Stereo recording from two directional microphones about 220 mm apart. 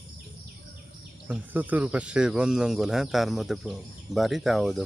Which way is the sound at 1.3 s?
5° right (ahead or behind).